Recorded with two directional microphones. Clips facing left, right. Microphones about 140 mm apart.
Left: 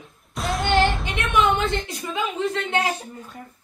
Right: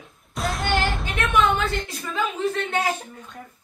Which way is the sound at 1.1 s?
25° left (ahead or behind).